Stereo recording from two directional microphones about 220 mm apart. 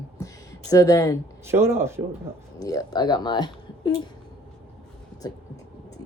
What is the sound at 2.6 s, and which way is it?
Speech, 15° left (ahead or behind).